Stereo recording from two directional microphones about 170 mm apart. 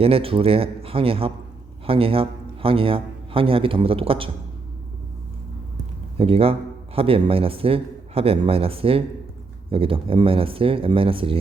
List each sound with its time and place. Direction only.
0.0 s a man's voice: 35° right (ahead or behind)
6.1 s a man's voice: 35° right (ahead or behind)